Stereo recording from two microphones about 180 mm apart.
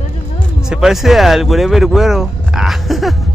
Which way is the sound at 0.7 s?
Centre (ahead or behind).